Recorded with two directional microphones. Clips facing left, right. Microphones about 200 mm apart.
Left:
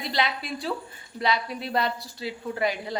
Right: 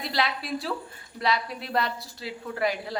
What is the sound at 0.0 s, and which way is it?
A woman's voice, centre (ahead or behind).